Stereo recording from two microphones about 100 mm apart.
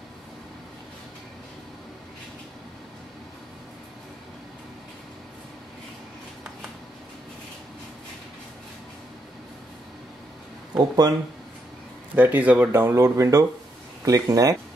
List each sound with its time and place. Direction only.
10.8 s speech: 40° right (ahead or behind)
12.2 s speech: 15° right (ahead or behind); by 14.6 s 35° right (ahead or behind)